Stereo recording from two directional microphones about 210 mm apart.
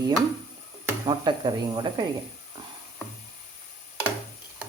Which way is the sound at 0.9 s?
20° right (ahead or behind).